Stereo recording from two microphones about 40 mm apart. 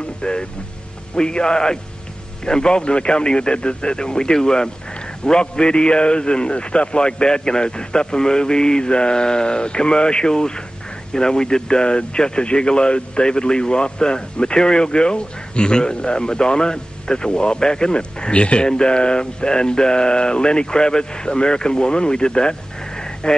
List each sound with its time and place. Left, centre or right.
0.2 s speech: left